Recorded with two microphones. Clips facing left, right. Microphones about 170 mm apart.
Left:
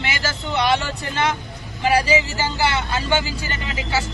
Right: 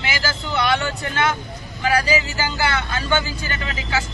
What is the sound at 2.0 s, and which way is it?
Speech, 25° left (ahead or behind).